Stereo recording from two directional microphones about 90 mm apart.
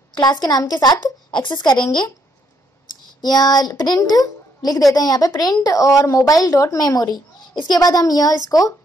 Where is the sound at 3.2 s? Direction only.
50° left (ahead or behind).